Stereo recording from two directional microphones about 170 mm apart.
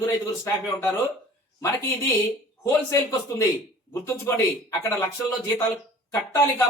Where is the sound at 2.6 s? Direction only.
20° left (ahead or behind).